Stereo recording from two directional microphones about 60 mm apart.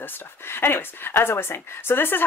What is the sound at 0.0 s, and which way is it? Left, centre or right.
Speech, left.